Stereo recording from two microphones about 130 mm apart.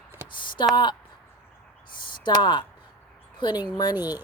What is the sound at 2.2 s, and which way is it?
Speech, 35° left (ahead or behind).